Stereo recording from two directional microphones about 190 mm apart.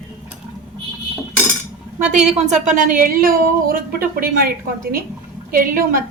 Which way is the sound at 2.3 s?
40° right (ahead or behind).